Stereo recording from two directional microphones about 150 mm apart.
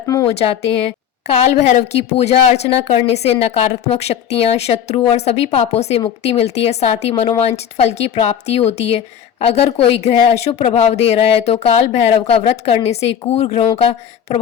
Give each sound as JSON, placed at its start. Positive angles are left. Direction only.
{"t": 1.3, "sound": "a woman's voice", "side_deg": 40}